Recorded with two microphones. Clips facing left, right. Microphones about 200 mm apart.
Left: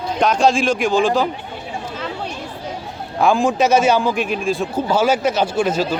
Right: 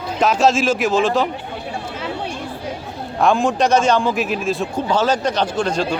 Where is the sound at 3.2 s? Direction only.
Centre (ahead or behind).